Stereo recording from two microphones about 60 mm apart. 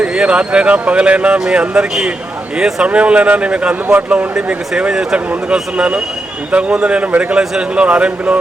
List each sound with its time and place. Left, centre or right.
0.0 s speech: centre
2.6 s speech: centre
2.8 s speech: right